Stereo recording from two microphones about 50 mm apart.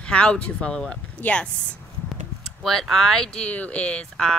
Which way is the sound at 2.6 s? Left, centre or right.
Centre.